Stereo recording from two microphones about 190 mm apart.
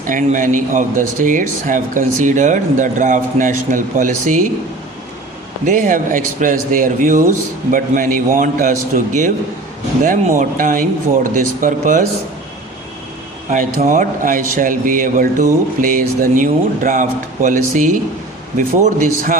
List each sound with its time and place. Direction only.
0.0 s speech: 45° right (ahead or behind)
5.6 s a man's voice: 45° right (ahead or behind)
13.5 s a man's voice: 45° right (ahead or behind)